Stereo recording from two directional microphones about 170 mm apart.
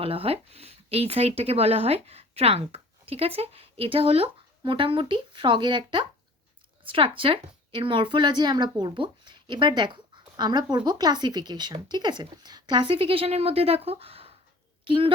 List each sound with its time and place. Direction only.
0.0 s a woman's voice: 35° right (ahead or behind)